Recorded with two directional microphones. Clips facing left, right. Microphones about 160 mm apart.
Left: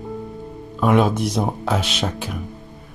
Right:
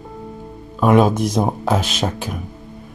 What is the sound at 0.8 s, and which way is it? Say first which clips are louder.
Speech: right 3 dB; 45° right (ahead or behind).